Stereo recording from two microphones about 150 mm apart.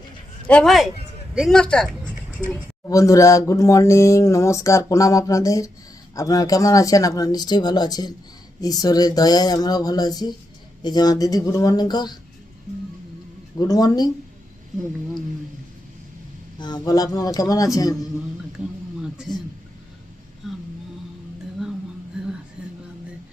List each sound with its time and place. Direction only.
0.4 s a man's voice: 5° left (ahead or behind)
2.9 s speech: 20° left (ahead or behind)
13.6 s speech: 25° left (ahead or behind)
16.6 s speech: 30° left (ahead or behind)
20.4 s a sound: centre (ahead or behind)
22.6 s music: 5° right (ahead or behind)